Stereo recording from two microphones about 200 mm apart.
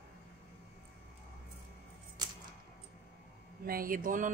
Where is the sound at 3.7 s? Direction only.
45° right (ahead or behind).